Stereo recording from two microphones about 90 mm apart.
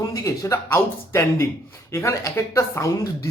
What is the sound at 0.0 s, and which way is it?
A man's voice, 40° left (ahead or behind).